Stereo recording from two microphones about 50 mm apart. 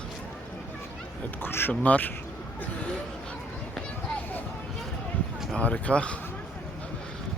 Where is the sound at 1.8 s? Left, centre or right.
Left.